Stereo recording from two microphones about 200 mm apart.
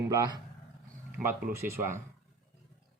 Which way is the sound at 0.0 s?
15° right (ahead or behind).